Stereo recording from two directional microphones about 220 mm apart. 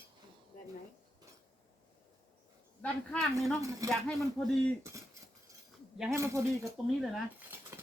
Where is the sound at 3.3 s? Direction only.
15° right (ahead or behind).